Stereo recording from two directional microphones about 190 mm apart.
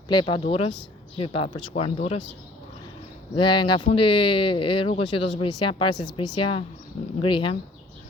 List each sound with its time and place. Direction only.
0.1 s speech: 25° left (ahead or behind)
3.3 s speech: 25° left (ahead or behind)